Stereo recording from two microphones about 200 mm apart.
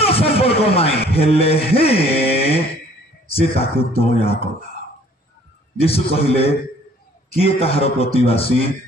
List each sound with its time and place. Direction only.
0.0 s a sound: 30° left (ahead or behind)
1.1 s speech: 30° left (ahead or behind)
3.3 s speech: 30° left (ahead or behind)
5.8 s speech: 30° left (ahead or behind)